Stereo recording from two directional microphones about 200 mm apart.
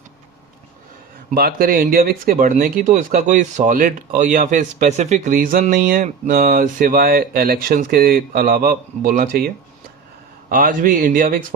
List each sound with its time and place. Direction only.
1.3 s speech: 45° right (ahead or behind)
10.5 s speech: 45° right (ahead or behind)